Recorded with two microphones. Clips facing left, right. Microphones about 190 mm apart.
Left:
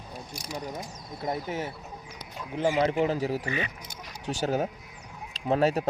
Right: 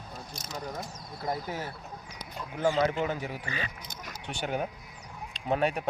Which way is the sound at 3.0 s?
35° left (ahead or behind).